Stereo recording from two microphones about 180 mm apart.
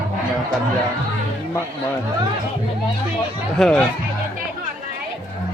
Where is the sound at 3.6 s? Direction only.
5° left (ahead or behind).